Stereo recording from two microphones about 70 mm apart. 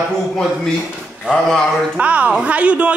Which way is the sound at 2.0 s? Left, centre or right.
Right.